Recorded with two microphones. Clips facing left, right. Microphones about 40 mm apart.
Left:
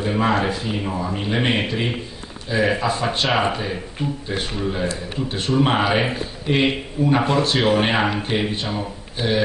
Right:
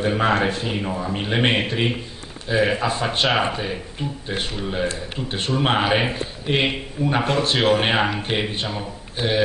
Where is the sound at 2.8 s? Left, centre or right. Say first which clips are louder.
Left 1 dB; centre.